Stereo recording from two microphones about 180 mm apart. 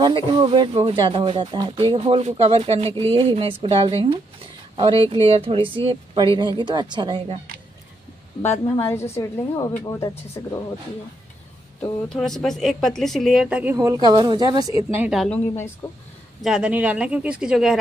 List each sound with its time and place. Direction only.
0.0 s a woman's voice: 25° right (ahead or behind)
8.7 s a woman's voice: 15° left (ahead or behind)
12.2 s a woman's voice: centre (ahead or behind)
13.7 s speech: 20° right (ahead or behind)
15.0 s a woman's voice: 5° right (ahead or behind)
15.2 s a woman's voice: 15° left (ahead or behind)
16.3 s a woman's voice: 5° right (ahead or behind)